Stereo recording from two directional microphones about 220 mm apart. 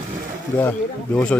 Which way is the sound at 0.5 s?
10° left (ahead or behind).